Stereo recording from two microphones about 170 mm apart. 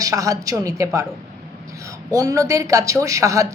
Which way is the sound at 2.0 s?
20° right (ahead or behind).